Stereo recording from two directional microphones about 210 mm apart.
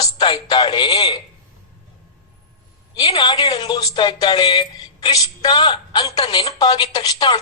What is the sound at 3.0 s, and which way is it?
A woman's voice, 20° left (ahead or behind).